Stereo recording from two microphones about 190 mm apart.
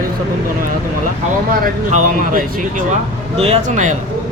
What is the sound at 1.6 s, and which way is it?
Speech, 40° right (ahead or behind).